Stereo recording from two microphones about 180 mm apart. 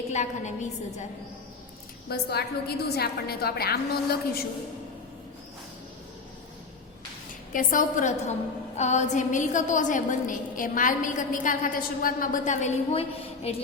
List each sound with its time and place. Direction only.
0.1 s a woman's voice: 40° left (ahead or behind)
2.0 s a woman's voice: 60° left (ahead or behind)
7.5 s a woman's voice: 50° left (ahead or behind)